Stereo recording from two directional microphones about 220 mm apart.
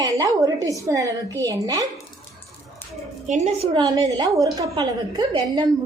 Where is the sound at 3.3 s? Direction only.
30° right (ahead or behind).